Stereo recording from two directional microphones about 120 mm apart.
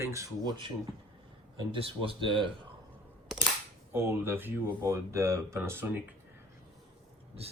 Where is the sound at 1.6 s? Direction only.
50° right (ahead or behind).